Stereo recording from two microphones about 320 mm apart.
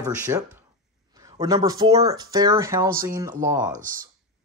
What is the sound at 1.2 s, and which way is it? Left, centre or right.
Speech, centre.